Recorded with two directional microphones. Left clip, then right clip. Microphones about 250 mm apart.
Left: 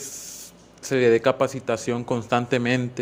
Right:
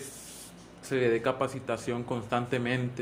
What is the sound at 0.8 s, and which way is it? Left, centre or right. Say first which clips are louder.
Speech: left 9 dB; left.